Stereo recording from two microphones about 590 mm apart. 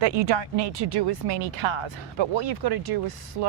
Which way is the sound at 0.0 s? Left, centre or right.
Right.